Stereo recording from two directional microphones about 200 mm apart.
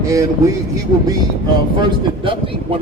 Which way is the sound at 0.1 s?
15° right (ahead or behind).